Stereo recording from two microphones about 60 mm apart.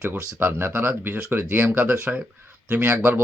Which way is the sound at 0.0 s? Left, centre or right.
Right.